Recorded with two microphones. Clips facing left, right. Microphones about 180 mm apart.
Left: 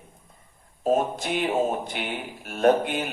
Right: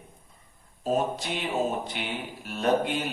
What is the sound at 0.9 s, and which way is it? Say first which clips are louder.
Speech: left 4 dB; 50° left (ahead or behind).